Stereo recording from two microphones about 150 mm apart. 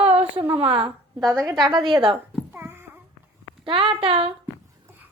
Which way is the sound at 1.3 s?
20° right (ahead or behind).